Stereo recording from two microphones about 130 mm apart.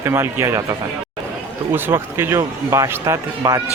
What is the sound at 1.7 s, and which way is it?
A man's voice, 20° right (ahead or behind).